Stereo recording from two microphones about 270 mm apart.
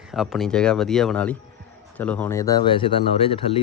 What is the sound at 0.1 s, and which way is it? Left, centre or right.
Speech, centre.